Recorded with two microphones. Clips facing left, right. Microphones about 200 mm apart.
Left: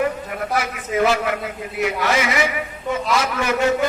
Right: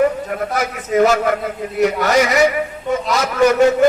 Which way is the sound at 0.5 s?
40° right (ahead or behind).